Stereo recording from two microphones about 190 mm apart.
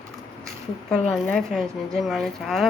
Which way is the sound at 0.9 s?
5° left (ahead or behind).